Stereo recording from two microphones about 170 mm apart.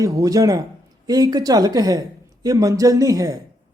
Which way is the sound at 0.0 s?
20° right (ahead or behind).